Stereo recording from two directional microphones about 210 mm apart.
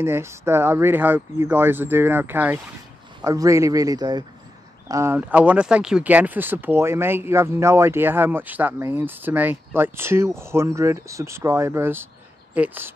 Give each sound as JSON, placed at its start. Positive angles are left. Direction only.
{"t": 0.0, "sound": "speech", "side_deg": -10}